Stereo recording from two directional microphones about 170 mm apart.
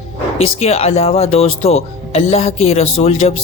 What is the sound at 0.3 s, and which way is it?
Speech, 35° left (ahead or behind).